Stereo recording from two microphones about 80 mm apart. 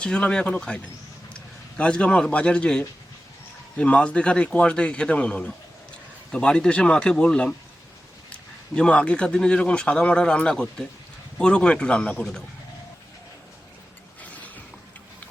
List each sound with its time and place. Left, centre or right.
0.0 s speech: centre
1.8 s speech: centre
14.2 s a sound: centre